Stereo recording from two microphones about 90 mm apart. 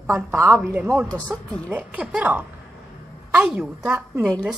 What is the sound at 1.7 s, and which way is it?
Speech, 15° right (ahead or behind).